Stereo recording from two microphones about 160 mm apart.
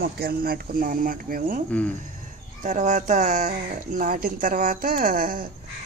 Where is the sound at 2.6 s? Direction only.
50° right (ahead or behind).